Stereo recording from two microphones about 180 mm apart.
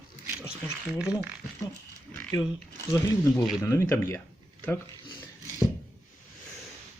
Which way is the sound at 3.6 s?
15° left (ahead or behind).